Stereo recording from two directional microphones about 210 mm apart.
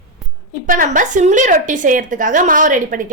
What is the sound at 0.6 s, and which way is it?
A woman's voice, 40° right (ahead or behind).